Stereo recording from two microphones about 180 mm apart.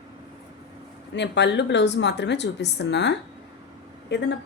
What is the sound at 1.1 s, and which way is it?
Speech, 75° left (ahead or behind).